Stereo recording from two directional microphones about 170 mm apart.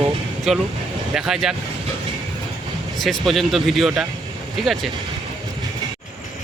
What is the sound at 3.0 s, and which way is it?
Speech, centre (ahead or behind).